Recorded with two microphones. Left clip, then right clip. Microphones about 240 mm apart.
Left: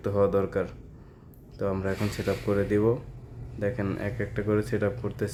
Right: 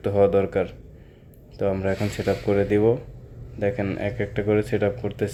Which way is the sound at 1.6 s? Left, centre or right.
Centre.